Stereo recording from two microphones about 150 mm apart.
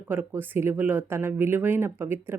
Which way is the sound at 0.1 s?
15° right (ahead or behind).